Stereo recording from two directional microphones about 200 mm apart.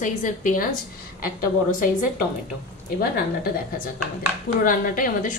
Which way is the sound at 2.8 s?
45° left (ahead or behind).